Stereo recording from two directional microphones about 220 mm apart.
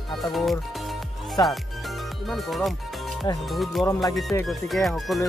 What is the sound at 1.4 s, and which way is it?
Music, 15° left (ahead or behind).